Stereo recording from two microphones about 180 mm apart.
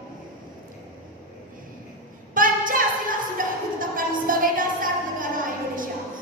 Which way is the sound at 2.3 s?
50° right (ahead or behind).